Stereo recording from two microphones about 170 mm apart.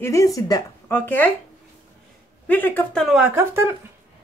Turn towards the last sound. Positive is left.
turn(degrees=-15)  # may be behind; listen again after turning